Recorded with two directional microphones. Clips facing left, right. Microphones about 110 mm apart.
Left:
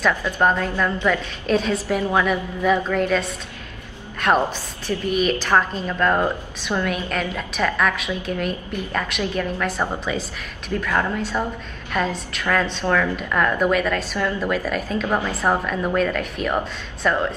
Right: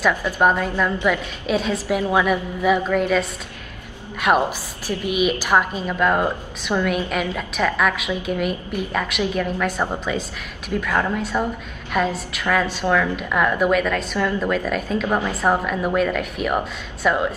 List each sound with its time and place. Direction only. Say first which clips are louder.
0.2 s a woman's voice: right 1 dB; 10° right (ahead or behind)
10.8 s a woman's voice: right 1 dB; 10° right (ahead or behind)
15.0 s a woman's voice: right 1 dB; 15° right (ahead or behind)